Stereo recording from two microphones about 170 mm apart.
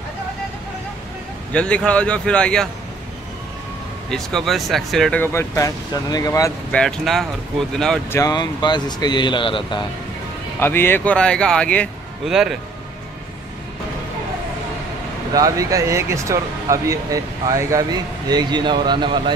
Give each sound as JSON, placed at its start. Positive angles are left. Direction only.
{"t": 1.5, "sound": "speech", "side_deg": 5}
{"t": 4.1, "sound": "speech", "side_deg": 5}
{"t": 5.2, "sound": "speech", "side_deg": 15}
{"t": 6.7, "sound": "speech", "side_deg": 5}
{"t": 8.1, "sound": "speech", "side_deg": 20}
{"t": 10.6, "sound": "speech", "side_deg": 15}
{"t": 15.3, "sound": "speech", "side_deg": -20}